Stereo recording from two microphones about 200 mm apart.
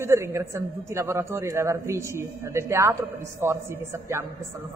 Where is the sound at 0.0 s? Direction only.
15° right (ahead or behind).